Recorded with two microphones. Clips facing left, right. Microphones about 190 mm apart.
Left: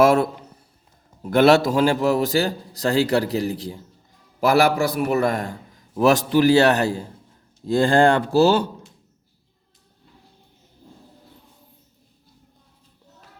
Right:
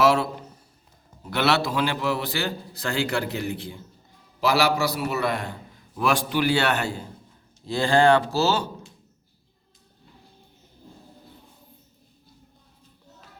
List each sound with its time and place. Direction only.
0.0 s a man's voice: 50° left (ahead or behind)
4.4 s a man's voice: 50° left (ahead or behind)
7.7 s a man's voice: 50° left (ahead or behind)